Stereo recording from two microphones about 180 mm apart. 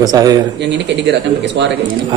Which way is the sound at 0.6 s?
75° right (ahead or behind).